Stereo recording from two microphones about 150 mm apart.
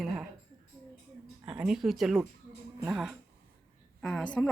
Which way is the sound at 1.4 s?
5° right (ahead or behind).